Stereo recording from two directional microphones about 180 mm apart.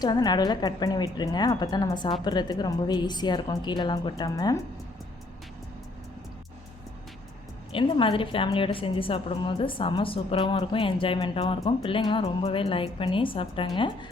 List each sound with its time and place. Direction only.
0.0 s a woman's voice: 20° left (ahead or behind)
7.7 s a woman's voice: 30° left (ahead or behind)